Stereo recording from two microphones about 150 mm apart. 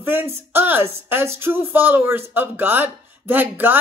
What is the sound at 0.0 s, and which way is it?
Speech, 15° right (ahead or behind).